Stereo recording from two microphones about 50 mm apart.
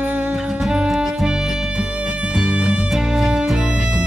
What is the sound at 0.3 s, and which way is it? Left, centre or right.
Music, centre.